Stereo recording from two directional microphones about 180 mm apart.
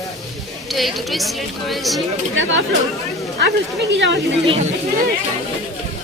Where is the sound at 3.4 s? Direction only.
75° right (ahead or behind).